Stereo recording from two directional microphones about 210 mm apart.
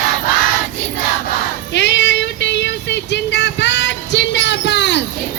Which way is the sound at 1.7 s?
60° left (ahead or behind).